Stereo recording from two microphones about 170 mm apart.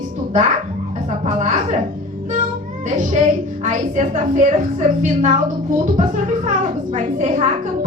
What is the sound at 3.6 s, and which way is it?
A woman's voice, 45° right (ahead or behind).